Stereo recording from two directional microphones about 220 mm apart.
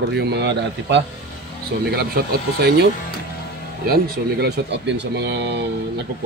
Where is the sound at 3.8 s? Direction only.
45° right (ahead or behind).